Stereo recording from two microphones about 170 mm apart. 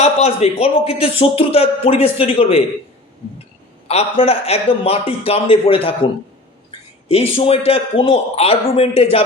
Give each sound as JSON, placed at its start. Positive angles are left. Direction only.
{"t": 0.0, "sound": "a man's voice", "side_deg": 35}
{"t": 3.8, "sound": "a man's voice", "side_deg": 35}